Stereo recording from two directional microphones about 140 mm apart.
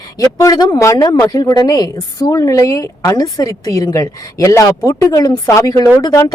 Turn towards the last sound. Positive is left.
turn(degrees=25)  # may be behind; listen again after turning